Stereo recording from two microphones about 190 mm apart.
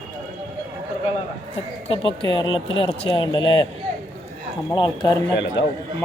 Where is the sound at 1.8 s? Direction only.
30° left (ahead or behind).